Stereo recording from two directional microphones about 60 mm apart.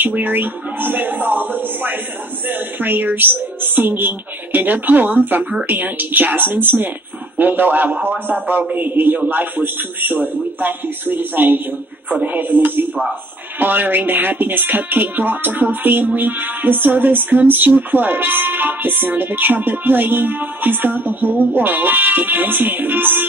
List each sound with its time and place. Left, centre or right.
0.2 s speech: right